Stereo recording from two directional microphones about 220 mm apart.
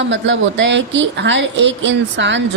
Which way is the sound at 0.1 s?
55° right (ahead or behind).